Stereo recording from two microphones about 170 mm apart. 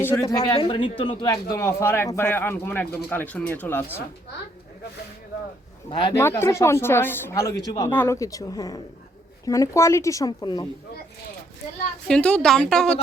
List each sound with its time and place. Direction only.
0.0 s a man's voice: 15° left (ahead or behind)
5.9 s a man's voice: 25° left (ahead or behind)
12.0 s a woman's voice: 5° left (ahead or behind)